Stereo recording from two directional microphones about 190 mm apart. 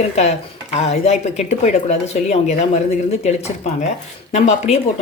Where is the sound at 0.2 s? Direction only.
35° left (ahead or behind).